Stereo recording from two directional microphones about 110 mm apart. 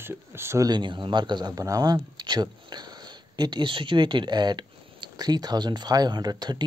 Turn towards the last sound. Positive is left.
turn(degrees=-40)  # may be behind; listen again after turning